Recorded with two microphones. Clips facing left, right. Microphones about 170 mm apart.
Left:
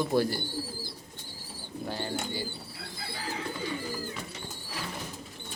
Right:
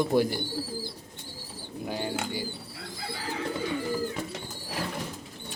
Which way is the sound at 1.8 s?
10° right (ahead or behind).